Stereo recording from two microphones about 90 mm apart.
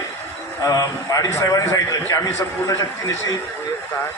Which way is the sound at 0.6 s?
40° left (ahead or behind).